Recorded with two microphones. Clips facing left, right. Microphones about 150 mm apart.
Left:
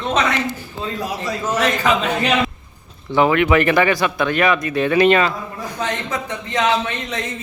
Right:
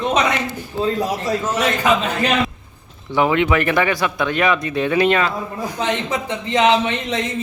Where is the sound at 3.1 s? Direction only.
15° right (ahead or behind).